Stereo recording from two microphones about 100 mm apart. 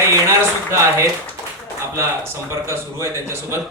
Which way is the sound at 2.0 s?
30° right (ahead or behind).